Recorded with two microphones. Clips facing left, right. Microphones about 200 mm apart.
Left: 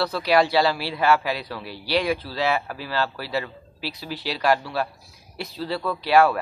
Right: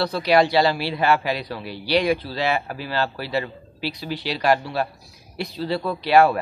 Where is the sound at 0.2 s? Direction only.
5° left (ahead or behind).